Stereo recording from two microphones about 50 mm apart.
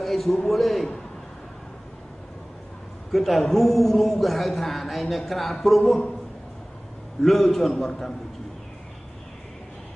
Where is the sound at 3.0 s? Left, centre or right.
Centre.